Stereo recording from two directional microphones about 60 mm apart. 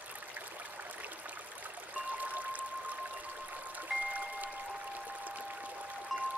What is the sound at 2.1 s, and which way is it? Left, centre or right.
Music, right.